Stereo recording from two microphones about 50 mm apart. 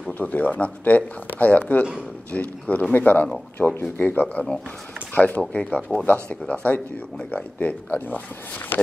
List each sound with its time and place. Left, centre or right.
0.2 s speech: left
3.6 s speech: left
4.0 s speech: left